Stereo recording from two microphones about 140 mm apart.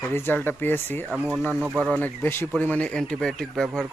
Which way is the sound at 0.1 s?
15° left (ahead or behind).